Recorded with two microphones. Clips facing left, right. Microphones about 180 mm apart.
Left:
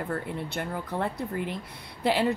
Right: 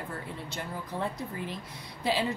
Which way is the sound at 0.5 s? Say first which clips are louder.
Left 3 dB; 60° left (ahead or behind).